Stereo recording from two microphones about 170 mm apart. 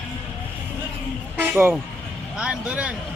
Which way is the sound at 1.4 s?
10° right (ahead or behind).